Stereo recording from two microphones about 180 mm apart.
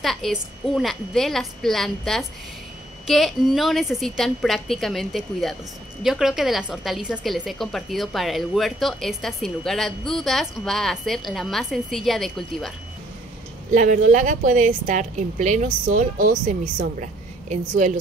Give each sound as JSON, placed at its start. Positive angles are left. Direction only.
{"t": 0.0, "sound": "a woman's voice", "side_deg": 0}
{"t": 13.7, "sound": "a woman's voice", "side_deg": -45}